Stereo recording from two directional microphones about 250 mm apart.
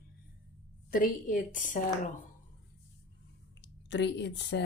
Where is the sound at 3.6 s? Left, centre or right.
Left.